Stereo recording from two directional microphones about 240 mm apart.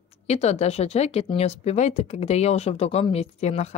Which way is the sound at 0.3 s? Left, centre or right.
Left.